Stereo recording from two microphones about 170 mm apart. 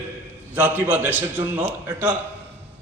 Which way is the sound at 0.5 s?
10° right (ahead or behind).